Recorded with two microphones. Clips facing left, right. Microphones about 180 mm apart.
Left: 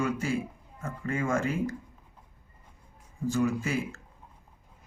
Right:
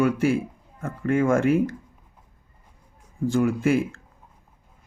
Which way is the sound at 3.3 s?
55° right (ahead or behind).